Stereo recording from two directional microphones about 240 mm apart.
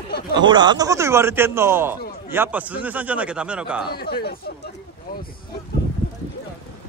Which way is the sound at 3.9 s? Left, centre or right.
Left.